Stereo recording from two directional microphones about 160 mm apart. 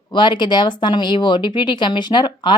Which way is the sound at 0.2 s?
30° left (ahead or behind).